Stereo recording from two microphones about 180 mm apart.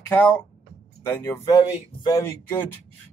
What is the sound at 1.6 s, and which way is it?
Speech, 25° left (ahead or behind).